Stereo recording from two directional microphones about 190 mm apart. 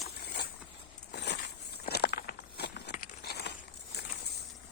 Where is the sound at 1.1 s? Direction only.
65° left (ahead or behind).